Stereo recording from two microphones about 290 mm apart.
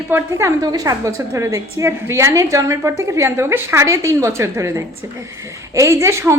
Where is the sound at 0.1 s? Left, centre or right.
Centre.